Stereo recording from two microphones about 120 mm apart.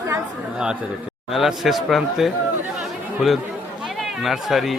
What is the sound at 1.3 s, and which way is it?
A man's voice, centre (ahead or behind).